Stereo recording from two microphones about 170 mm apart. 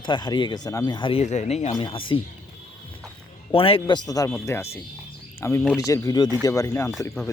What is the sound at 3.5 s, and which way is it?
Speech, 30° left (ahead or behind).